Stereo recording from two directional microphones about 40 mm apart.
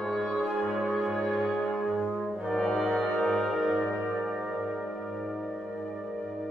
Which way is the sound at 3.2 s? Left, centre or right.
Centre.